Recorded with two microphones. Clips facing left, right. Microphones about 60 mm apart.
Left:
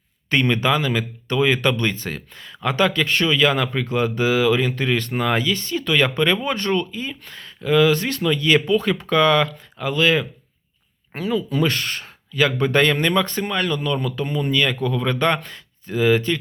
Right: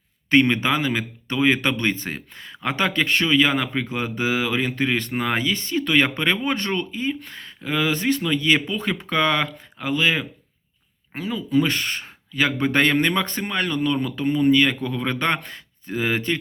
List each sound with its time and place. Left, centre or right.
0.3 s speech: right
11.1 s speech: centre
11.5 s speech: centre